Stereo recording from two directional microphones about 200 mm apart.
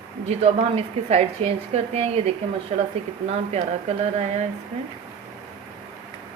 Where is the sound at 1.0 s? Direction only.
30° right (ahead or behind).